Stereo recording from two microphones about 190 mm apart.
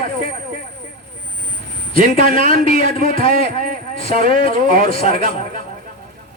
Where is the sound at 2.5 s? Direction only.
45° right (ahead or behind).